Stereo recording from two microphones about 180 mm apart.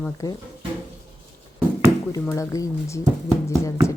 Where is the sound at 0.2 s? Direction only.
20° left (ahead or behind).